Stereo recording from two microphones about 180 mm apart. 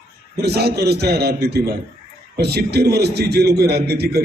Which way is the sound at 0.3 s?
65° right (ahead or behind).